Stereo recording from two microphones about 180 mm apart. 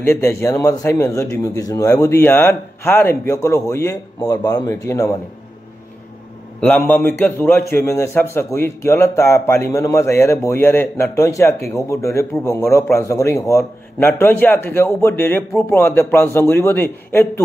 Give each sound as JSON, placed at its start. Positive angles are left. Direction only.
{"t": 0.0, "sound": "a man's voice", "side_deg": 15}
{"t": 6.6, "sound": "a man's voice", "side_deg": 10}